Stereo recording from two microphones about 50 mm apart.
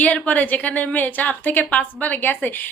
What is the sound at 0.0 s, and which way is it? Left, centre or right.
A woman's voice, left.